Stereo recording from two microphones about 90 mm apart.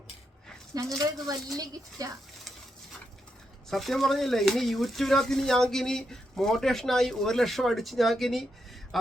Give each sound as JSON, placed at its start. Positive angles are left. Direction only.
{"t": 0.7, "sound": "speech", "side_deg": -40}
{"t": 3.7, "sound": "speech", "side_deg": 0}